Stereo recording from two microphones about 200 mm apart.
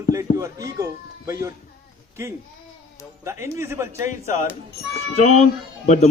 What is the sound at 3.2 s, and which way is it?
Speech, 15° right (ahead or behind).